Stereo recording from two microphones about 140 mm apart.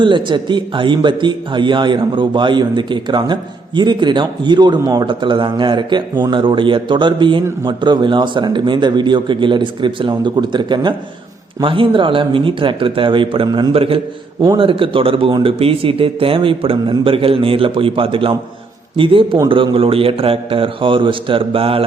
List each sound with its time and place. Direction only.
0.0 s a man's voice: 35° right (ahead or behind)